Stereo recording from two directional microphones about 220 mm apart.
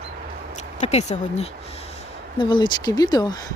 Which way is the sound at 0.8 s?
30° left (ahead or behind).